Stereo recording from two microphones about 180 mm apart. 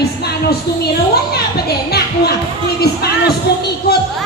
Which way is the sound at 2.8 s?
60° left (ahead or behind).